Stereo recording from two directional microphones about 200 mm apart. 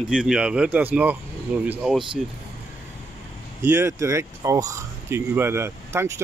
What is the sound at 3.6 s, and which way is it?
Speech, 15° right (ahead or behind).